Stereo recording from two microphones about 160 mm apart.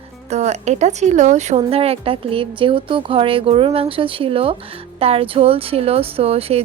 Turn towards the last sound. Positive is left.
turn(degrees=-40)  # may be behind; listen again after turning